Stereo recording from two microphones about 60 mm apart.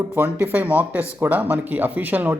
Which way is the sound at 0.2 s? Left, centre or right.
Right.